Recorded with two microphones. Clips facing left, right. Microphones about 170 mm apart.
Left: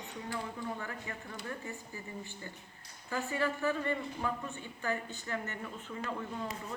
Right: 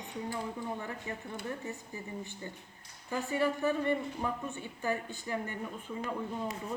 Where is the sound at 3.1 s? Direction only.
15° right (ahead or behind).